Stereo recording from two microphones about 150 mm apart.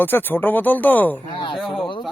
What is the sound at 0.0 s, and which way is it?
Speech, 15° left (ahead or behind).